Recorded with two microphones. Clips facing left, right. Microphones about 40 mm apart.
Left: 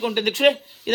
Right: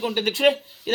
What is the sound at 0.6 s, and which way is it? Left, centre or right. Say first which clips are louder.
Speech: left 1 dB; centre.